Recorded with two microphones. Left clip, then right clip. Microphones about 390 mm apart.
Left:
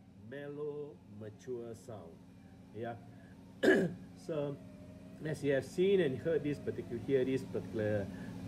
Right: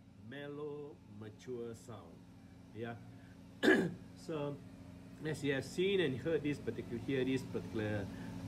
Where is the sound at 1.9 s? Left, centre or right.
Centre.